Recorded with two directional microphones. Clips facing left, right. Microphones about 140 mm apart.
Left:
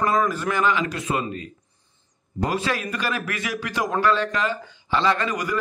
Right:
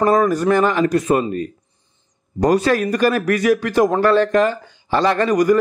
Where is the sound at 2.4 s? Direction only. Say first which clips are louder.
Right 10 dB; 45° right (ahead or behind).